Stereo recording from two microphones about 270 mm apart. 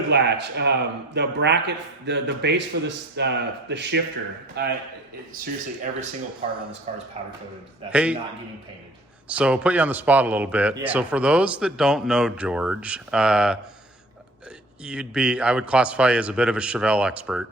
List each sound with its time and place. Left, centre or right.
0.1 s a man's voice: right
6.4 s speech: right
7.9 s speech: centre
9.3 s speech: centre
14.8 s speech: centre